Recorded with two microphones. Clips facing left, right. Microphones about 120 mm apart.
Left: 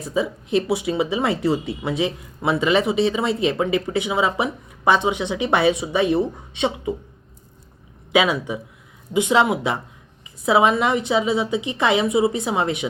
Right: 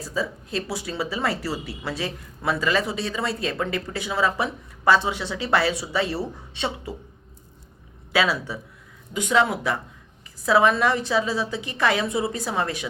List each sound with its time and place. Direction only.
0.0 s speech: 20° left (ahead or behind)
8.1 s speech: 20° left (ahead or behind)